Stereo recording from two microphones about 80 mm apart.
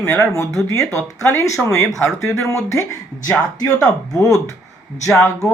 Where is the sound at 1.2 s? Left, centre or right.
Left.